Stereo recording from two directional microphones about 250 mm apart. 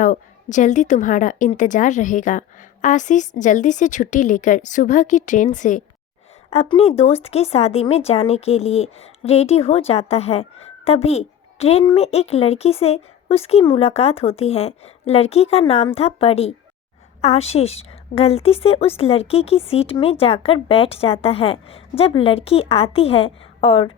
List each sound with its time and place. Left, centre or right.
0.0 s a woman's voice: left